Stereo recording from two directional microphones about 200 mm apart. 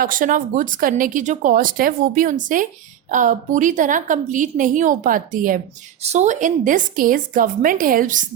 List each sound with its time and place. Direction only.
0.0 s a woman's voice: 45° right (ahead or behind)